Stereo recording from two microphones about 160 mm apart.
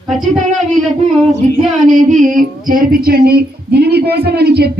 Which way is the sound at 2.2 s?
55° right (ahead or behind).